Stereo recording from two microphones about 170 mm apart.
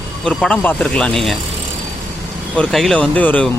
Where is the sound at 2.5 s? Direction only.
5° left (ahead or behind).